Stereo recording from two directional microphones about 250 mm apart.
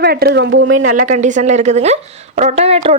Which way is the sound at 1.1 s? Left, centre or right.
Right.